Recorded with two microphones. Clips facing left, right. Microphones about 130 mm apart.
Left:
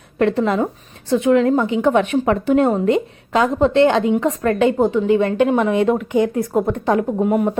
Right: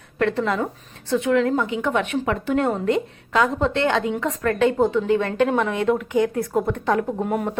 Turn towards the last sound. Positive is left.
turn(degrees=10)  # may be behind; listen again after turning